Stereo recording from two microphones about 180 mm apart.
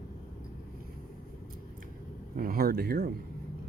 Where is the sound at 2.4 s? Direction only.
55° right (ahead or behind).